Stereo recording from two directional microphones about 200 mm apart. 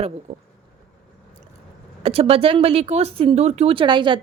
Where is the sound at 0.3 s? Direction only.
35° right (ahead or behind).